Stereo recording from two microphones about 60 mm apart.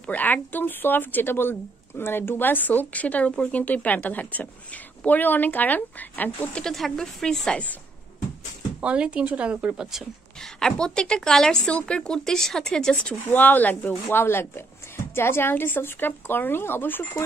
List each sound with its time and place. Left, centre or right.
0.0 s a woman's voice: left
6.5 s a woman's voice: centre
8.8 s speech: centre
10.4 s a woman's voice: centre
13.3 s speech: left